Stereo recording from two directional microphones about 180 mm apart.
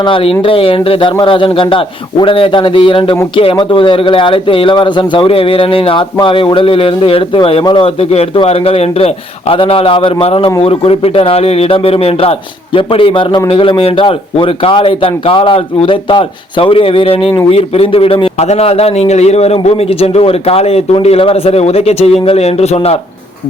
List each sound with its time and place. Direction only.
0.0 s a man's voice: 30° left (ahead or behind)